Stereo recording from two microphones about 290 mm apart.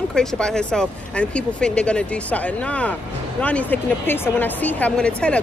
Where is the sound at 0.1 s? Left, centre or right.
Centre.